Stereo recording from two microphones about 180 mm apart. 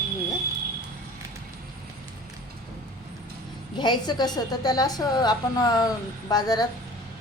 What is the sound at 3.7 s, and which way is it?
A woman's voice, 25° left (ahead or behind).